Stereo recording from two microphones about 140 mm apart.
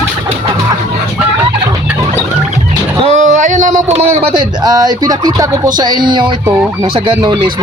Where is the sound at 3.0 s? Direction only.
55° right (ahead or behind).